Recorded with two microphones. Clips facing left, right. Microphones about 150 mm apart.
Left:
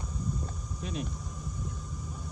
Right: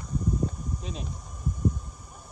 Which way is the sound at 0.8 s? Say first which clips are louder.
Left 2 dB; 55° left (ahead or behind).